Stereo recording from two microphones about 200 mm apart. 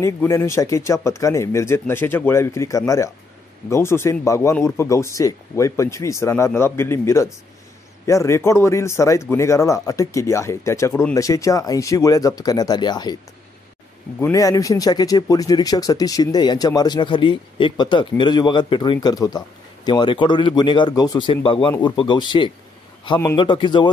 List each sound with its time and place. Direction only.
0.0 s speech: 15° left (ahead or behind)
14.2 s speech: 15° left (ahead or behind)